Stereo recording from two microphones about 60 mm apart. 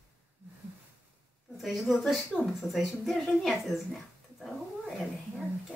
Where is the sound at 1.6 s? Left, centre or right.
Centre.